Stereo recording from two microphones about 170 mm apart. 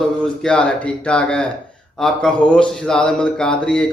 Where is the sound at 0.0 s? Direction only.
5° left (ahead or behind).